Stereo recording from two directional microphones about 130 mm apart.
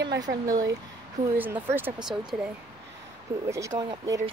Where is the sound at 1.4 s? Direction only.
15° right (ahead or behind).